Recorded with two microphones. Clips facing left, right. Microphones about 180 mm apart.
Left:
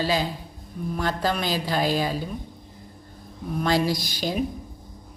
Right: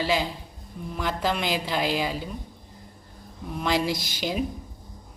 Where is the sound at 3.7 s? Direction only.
20° right (ahead or behind).